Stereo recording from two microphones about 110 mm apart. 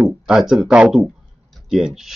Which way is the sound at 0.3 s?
Centre (ahead or behind).